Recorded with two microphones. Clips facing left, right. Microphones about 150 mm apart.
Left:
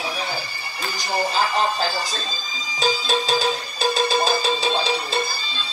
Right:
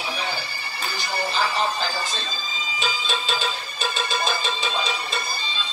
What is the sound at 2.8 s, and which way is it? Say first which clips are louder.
Music: left 7 dB; 40° left (ahead or behind).